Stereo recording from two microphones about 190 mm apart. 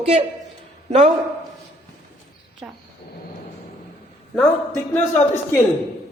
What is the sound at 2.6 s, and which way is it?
Speech, 5° right (ahead or behind).